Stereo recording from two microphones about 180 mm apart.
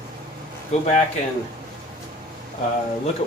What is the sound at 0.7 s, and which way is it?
Speech, 40° left (ahead or behind).